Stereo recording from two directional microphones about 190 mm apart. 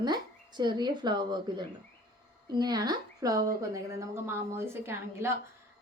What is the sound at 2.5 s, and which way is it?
A woman's voice, 20° right (ahead or behind).